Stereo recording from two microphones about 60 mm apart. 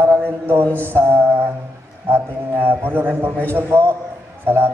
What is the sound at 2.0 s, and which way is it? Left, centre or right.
A man's voice, right.